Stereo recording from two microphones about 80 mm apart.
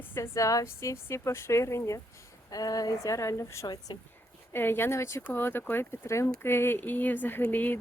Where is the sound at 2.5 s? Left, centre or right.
Left.